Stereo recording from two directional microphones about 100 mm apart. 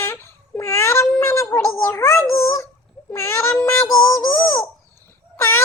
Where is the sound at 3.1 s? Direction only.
25° left (ahead or behind).